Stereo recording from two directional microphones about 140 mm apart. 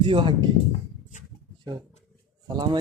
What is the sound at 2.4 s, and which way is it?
Speech, 30° right (ahead or behind).